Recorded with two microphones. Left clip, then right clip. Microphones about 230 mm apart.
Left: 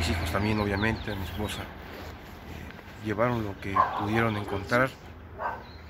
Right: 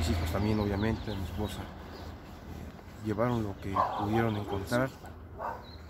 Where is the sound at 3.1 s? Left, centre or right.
Centre.